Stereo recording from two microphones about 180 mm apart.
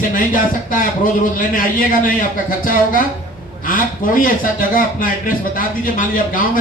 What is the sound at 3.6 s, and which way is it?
A man's voice, 50° left (ahead or behind).